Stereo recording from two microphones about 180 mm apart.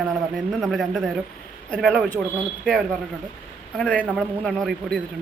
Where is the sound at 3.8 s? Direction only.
5° left (ahead or behind).